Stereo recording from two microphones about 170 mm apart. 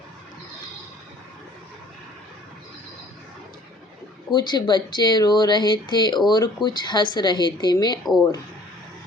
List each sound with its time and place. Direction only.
4.3 s speech: 25° left (ahead or behind)